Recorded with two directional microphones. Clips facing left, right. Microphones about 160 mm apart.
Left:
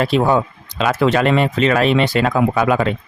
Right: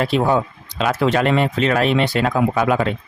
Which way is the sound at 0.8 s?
90° left.